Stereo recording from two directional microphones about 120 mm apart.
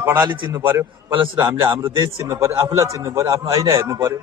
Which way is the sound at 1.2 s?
35° right (ahead or behind).